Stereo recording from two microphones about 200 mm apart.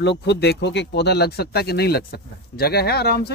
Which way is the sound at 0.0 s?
60° left (ahead or behind).